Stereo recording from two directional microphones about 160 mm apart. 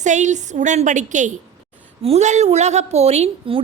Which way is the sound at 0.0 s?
50° right (ahead or behind).